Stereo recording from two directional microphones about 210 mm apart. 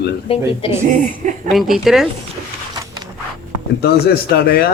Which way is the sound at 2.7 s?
15° right (ahead or behind).